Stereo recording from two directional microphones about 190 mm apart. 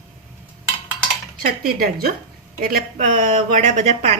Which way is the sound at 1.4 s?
50° right (ahead or behind).